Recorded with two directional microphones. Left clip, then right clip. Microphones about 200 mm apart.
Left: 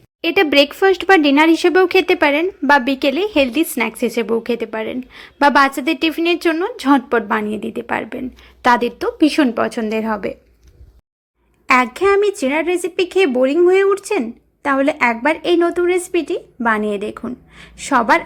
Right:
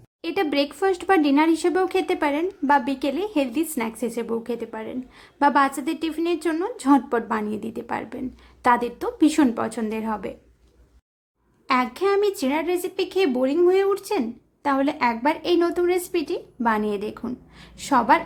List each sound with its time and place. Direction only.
0.2 s speech: 20° left (ahead or behind)
11.7 s speech: 20° left (ahead or behind)